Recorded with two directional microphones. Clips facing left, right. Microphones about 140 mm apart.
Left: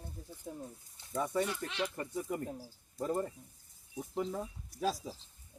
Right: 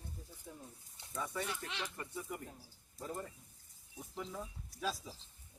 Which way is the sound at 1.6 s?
40° left (ahead or behind).